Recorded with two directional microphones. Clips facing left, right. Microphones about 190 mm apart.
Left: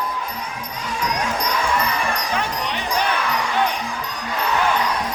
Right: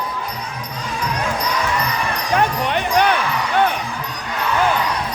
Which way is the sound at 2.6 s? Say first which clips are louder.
Right 6 dB; 60° right (ahead or behind).